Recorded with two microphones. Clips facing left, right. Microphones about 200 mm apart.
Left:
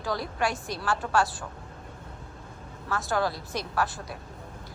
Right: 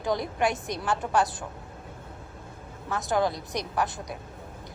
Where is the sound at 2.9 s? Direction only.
20° right (ahead or behind).